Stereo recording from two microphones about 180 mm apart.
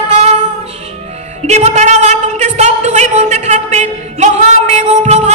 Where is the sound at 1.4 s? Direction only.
40° right (ahead or behind).